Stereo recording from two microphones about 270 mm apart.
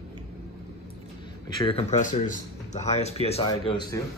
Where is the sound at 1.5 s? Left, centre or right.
Centre.